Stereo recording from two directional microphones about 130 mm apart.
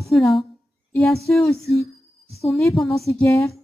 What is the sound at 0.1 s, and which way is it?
Speech, centre (ahead or behind).